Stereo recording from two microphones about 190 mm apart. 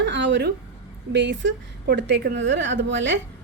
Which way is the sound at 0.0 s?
70° right (ahead or behind).